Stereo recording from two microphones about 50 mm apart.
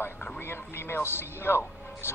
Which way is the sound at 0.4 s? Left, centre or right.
Left.